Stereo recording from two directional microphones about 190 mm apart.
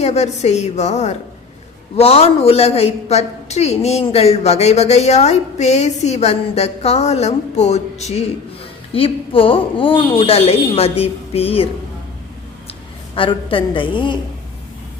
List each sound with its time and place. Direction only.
0.0 s a woman's voice: 35° left (ahead or behind)
13.1 s a woman's voice: 30° left (ahead or behind)